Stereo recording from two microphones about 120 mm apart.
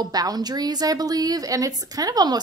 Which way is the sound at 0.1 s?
35° right (ahead or behind).